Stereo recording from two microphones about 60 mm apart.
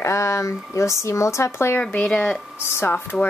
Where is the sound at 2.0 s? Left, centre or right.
Centre.